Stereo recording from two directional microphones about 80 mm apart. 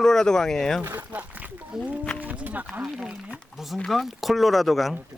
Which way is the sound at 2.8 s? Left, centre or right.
Centre.